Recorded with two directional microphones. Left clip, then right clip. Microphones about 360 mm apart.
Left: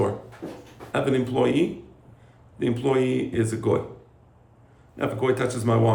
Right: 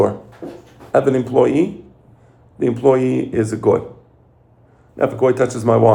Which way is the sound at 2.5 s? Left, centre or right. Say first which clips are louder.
Right 8 dB; centre.